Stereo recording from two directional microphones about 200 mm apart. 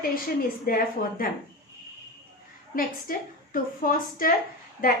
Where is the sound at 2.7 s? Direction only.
45° left (ahead or behind).